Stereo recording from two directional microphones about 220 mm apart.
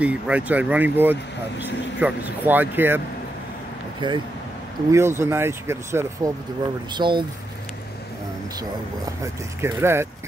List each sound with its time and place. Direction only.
0.0 s speech: 5° right (ahead or behind)
4.0 s speech: 20° right (ahead or behind)
8.5 s speech: 15° right (ahead or behind)